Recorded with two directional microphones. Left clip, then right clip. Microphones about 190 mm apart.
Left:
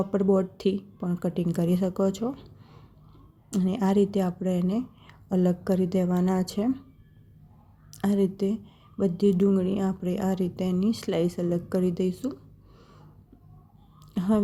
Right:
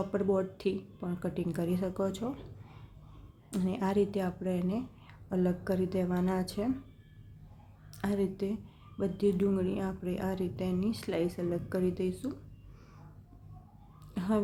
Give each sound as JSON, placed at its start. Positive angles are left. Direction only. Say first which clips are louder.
{"t": 0.1, "sound": "a woman's voice", "louder": "left 6 dB", "side_deg": 30}
{"t": 3.5, "sound": "a woman's voice", "louder": "left 6 dB", "side_deg": 30}
{"t": 7.9, "sound": "a woman's voice", "louder": "left 7 dB", "side_deg": 30}
{"t": 14.1, "sound": "speech", "louder": "left 6 dB", "side_deg": 30}